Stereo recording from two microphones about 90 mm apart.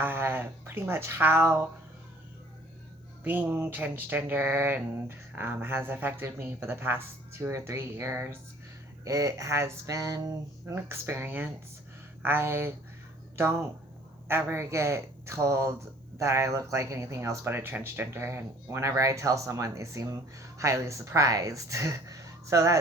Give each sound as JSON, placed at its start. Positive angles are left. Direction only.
{"t": 0.0, "sound": "speech", "side_deg": -25}
{"t": 3.2, "sound": "speech", "side_deg": -20}